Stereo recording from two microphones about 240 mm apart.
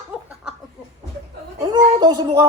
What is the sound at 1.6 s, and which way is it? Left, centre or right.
Speech, centre.